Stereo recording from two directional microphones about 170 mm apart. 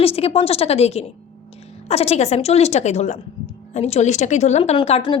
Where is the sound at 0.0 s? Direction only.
35° left (ahead or behind).